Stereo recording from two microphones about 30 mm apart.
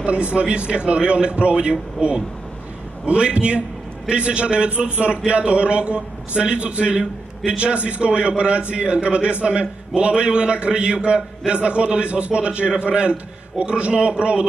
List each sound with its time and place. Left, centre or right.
0.0 s a man's voice: right